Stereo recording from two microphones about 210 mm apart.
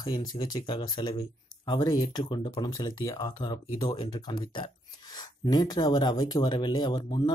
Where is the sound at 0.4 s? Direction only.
20° left (ahead or behind).